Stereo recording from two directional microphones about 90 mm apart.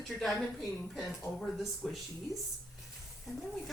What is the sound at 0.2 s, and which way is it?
Speech, centre (ahead or behind).